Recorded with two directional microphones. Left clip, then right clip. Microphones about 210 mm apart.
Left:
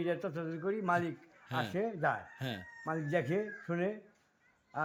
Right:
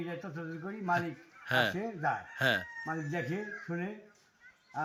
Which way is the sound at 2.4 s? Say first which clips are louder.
Right 13 dB; 5° left (ahead or behind).